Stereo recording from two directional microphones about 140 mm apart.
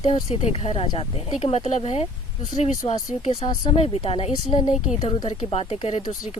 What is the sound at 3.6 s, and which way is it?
Speech, 45° left (ahead or behind).